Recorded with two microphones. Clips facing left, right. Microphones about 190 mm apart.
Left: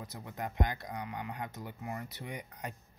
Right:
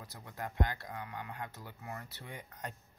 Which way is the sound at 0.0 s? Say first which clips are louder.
Left 3 dB; 20° left (ahead or behind).